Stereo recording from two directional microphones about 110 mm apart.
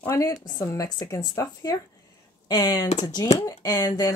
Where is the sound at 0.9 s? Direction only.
40° left (ahead or behind).